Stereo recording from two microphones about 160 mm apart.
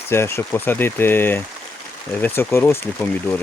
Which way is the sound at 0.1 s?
15° left (ahead or behind).